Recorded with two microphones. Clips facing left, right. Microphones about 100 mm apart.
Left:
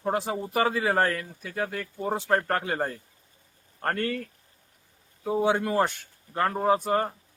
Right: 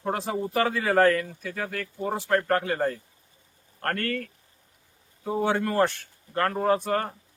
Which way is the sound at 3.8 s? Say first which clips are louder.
Even; 15° left (ahead or behind).